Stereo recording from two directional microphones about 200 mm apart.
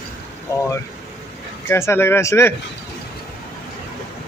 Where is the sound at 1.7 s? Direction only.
10° left (ahead or behind).